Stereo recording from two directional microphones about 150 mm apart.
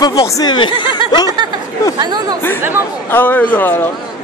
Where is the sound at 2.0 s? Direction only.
30° right (ahead or behind).